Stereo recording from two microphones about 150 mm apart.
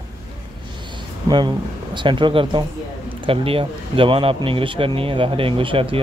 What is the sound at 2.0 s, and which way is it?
Speech, 30° right (ahead or behind).